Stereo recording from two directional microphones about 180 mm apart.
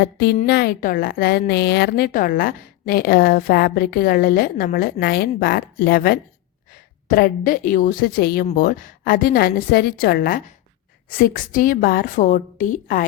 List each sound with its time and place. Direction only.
0.0 s a woman's voice: 65° left (ahead or behind); by 13.1 s 45° left (ahead or behind)